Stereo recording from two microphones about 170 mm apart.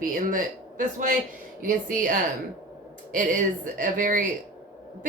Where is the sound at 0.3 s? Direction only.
50° right (ahead or behind).